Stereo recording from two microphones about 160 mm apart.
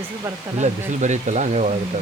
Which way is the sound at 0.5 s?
45° right (ahead or behind).